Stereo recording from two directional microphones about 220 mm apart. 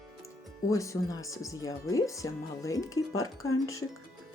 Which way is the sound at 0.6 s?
15° left (ahead or behind).